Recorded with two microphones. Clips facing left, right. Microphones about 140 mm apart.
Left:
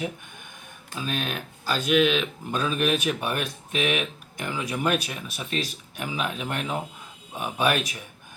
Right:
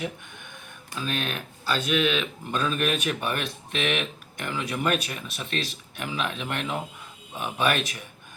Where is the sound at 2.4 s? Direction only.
10° left (ahead or behind).